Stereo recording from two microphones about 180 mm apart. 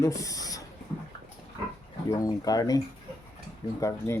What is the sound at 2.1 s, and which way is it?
Speech, 20° left (ahead or behind).